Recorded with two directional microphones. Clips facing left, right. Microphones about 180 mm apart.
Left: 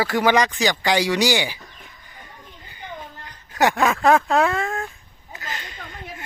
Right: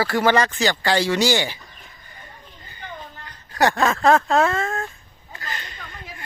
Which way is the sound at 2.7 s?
15° left (ahead or behind).